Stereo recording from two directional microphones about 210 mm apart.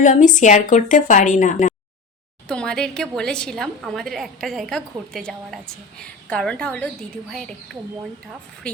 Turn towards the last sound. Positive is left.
turn(degrees=5)  # may be behind; listen again after turning